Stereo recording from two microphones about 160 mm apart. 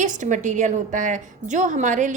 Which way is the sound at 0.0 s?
50° right (ahead or behind).